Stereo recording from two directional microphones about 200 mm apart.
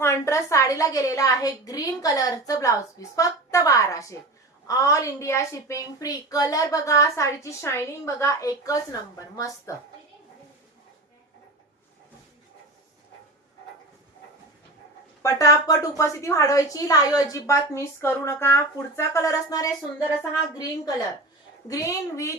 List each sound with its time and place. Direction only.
0.0 s a woman's voice: 15° left (ahead or behind)
15.2 s a woman's voice: 15° left (ahead or behind)
21.7 s a woman's voice: 15° left (ahead or behind)